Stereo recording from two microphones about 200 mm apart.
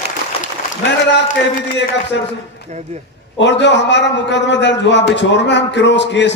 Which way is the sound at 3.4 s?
60° left (ahead or behind).